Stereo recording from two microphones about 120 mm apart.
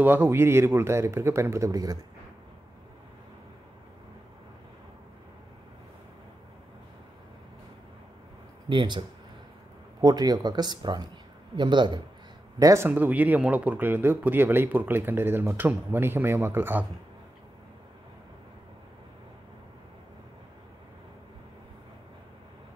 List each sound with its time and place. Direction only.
0.0 s a man's voice: 15° right (ahead or behind); by 2.0 s 30° right (ahead or behind)
8.6 s speech: 40° right (ahead or behind)
10.0 s speech: 35° right (ahead or behind)
12.5 s speech: 25° right (ahead or behind)